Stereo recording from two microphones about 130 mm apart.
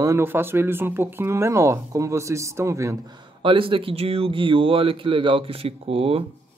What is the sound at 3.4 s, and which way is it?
Speech, 40° right (ahead or behind).